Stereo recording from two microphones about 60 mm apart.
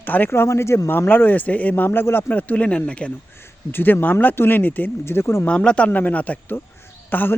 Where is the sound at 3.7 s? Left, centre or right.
Left.